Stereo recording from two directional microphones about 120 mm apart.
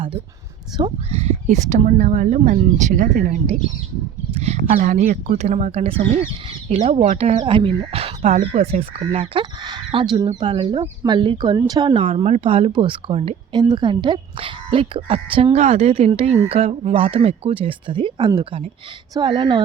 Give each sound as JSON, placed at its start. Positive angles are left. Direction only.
{"t": 0.8, "sound": "speech", "side_deg": -55}
{"t": 4.4, "sound": "speech", "side_deg": -65}
{"t": 7.5, "sound": "speech", "side_deg": -50}
{"t": 13.5, "sound": "speech", "side_deg": -40}